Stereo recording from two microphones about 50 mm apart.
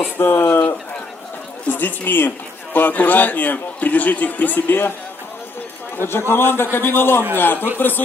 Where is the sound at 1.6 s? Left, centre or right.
Left.